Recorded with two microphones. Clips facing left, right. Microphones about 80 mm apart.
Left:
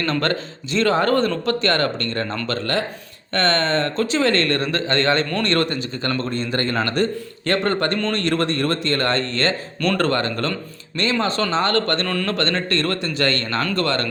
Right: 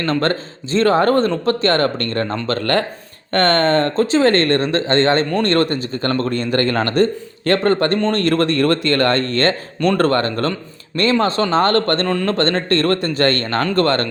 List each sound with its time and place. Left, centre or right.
0.0 s speech: right
2.2 s speech: right
2.5 s a man's voice: right
8.2 s a man's voice: right
12.0 s speech: right